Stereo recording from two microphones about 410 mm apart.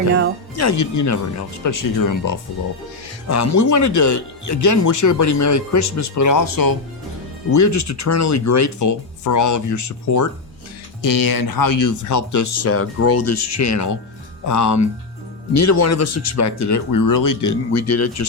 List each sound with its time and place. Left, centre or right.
0.5 s speech: left
7.5 s speech: left
11.0 s speech: left